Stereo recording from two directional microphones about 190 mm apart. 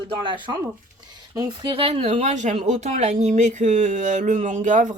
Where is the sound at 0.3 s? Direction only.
25° right (ahead or behind).